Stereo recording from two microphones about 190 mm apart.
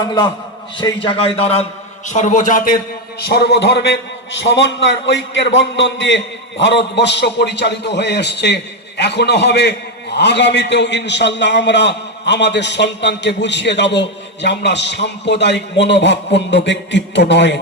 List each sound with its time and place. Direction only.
0.0 s a man's voice: 20° left (ahead or behind)
1.0 s a man's voice: 30° left (ahead or behind); by 17.6 s 65° left (ahead or behind)